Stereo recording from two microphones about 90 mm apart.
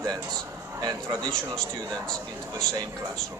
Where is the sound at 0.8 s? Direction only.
45° right (ahead or behind).